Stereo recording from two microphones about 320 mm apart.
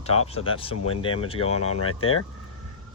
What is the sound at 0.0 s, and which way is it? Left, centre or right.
Speech, centre.